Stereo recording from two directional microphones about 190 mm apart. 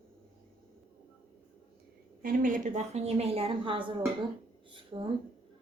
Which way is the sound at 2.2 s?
45° right (ahead or behind).